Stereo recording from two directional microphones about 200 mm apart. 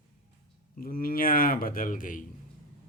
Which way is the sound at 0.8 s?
45° left (ahead or behind).